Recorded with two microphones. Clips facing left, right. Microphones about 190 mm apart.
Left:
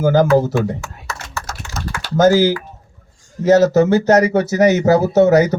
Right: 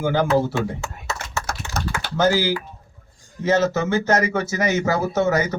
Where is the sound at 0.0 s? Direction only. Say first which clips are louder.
Left 6 dB; 40° left (ahead or behind).